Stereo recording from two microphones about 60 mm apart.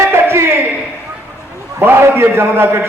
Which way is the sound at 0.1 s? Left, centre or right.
Right.